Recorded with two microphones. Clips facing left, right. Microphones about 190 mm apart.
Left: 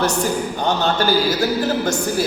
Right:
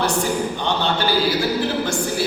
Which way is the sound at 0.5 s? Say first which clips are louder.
Left 3 dB; 40° left (ahead or behind).